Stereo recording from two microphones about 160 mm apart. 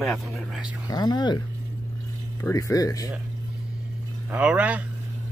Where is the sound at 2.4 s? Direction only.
20° left (ahead or behind).